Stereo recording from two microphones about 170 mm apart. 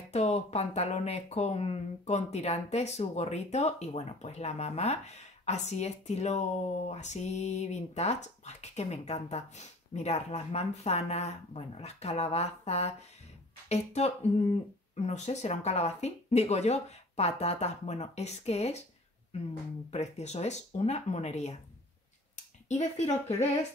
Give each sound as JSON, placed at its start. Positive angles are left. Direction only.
{"t": 0.1, "sound": "speech", "side_deg": 40}
{"t": 19.9, "sound": "speech", "side_deg": 40}
{"t": 22.7, "sound": "speech", "side_deg": 40}